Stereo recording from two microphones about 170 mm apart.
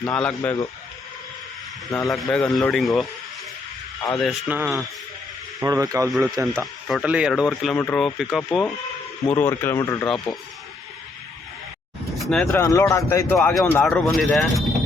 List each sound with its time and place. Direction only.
0.0 s speech: 5° left (ahead or behind)
2.0 s speech: centre (ahead or behind)
4.1 s speech: centre (ahead or behind)
4.4 s speech: 10° right (ahead or behind)
5.5 s speech: 20° right (ahead or behind)
6.1 s speech: centre (ahead or behind)
7.8 s speech: 15° left (ahead or behind)
8.0 s speech: centre (ahead or behind)
9.2 s speech: 15° left (ahead or behind)
12.1 s a sound: centre (ahead or behind)
12.5 s speech: 15° left (ahead or behind)
13.3 s speech: centre (ahead or behind)